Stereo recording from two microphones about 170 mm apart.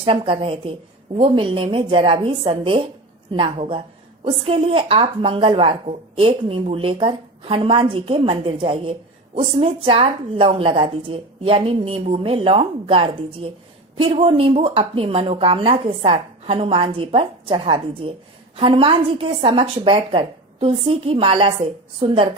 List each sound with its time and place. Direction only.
0.0 s a woman's voice: 30° right (ahead or behind)